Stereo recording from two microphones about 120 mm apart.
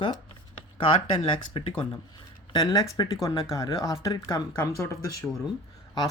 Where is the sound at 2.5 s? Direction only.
35° left (ahead or behind).